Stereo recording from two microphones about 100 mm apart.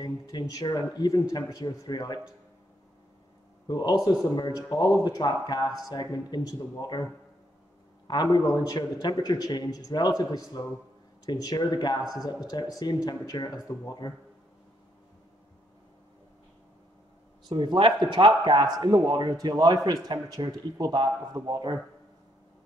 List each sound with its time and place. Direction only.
0.0 s speech: 40° left (ahead or behind)
3.6 s speech: 45° left (ahead or behind)
8.1 s speech: 40° left (ahead or behind)
17.5 s a man's voice: 50° right (ahead or behind)